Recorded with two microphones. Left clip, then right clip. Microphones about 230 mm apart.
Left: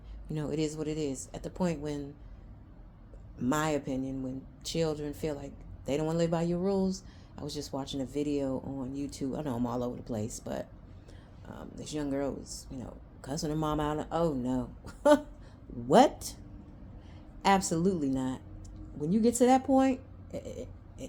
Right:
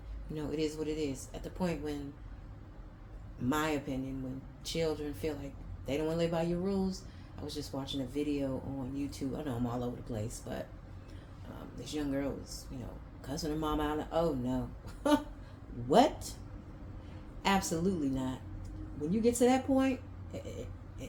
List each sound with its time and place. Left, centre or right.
0.3 s a man's voice: left
3.5 s a man's voice: left
11.7 s a man's voice: left
17.4 s a man's voice: left
21.0 s a sound: left